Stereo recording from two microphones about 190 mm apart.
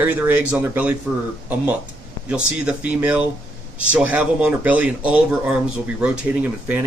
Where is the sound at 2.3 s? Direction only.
5° right (ahead or behind).